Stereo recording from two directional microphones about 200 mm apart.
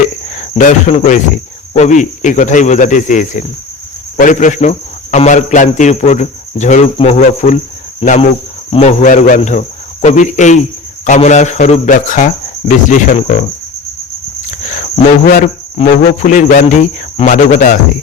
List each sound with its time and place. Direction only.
0.3 s speech: 35° left (ahead or behind)
14.7 s cricket: 40° left (ahead or behind)
15.8 s speech: 40° left (ahead or behind)